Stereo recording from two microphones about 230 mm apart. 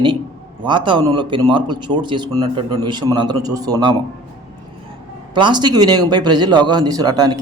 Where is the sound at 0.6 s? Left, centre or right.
Right.